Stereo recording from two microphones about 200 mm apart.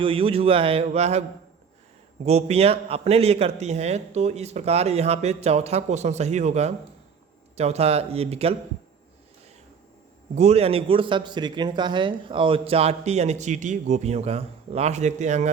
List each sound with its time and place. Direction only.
0.0 s speech: 25° right (ahead or behind)
2.2 s a man's voice: 30° right (ahead or behind)
10.3 s a man's voice: 30° right (ahead or behind)